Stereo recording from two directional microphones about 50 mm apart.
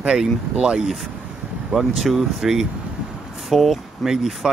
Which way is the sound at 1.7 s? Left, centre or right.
Centre.